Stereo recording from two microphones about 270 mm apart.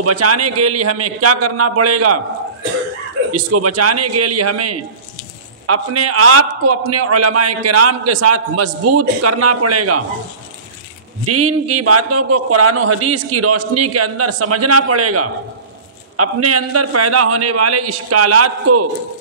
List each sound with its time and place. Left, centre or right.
0.0 s a man's voice: right
3.3 s a man's voice: right
11.2 s a man's voice: right